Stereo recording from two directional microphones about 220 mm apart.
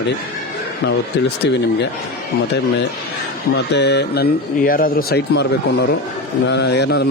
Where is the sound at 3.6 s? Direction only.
50° left (ahead or behind).